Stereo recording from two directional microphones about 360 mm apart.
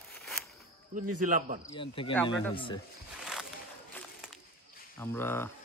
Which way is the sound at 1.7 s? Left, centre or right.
Centre.